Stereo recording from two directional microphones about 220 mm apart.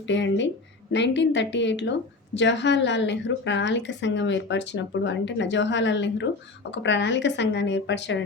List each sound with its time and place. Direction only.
0.1 s a woman's voice: 55° left (ahead or behind)